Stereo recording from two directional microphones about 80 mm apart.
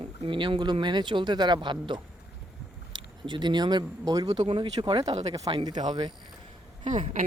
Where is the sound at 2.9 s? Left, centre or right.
Right.